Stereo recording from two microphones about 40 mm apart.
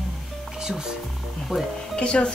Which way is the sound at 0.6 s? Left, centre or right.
Centre.